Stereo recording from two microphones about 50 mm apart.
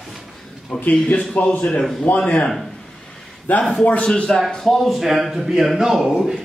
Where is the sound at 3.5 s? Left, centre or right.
Left.